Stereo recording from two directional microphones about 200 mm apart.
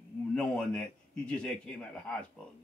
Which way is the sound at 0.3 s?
5° left (ahead or behind).